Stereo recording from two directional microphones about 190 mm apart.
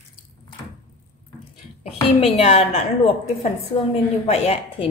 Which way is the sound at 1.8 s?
30° left (ahead or behind).